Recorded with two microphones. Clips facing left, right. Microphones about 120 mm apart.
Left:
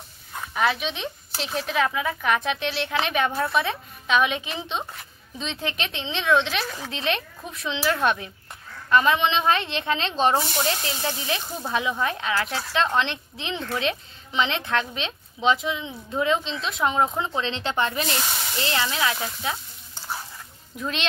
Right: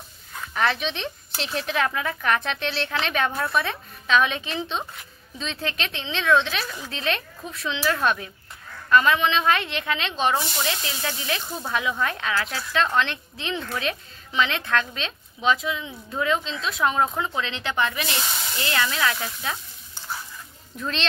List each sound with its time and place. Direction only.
0.6 s a woman's voice: 5° left (ahead or behind)
20.7 s speech: 10° left (ahead or behind)